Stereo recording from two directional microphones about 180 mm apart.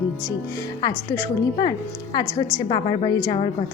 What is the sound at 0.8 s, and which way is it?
Speech, 15° left (ahead or behind).